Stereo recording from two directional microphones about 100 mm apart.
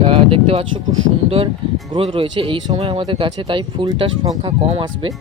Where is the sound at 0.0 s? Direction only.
65° right (ahead or behind).